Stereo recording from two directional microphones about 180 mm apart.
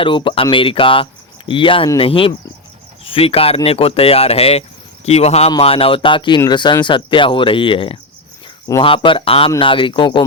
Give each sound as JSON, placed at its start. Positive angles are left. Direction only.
{"t": 0.0, "sound": "speech", "side_deg": 30}